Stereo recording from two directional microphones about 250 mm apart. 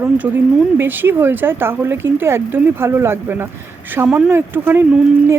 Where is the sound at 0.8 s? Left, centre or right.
Centre.